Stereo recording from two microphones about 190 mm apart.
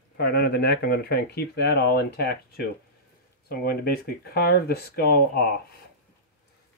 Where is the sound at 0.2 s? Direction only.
55° left (ahead or behind).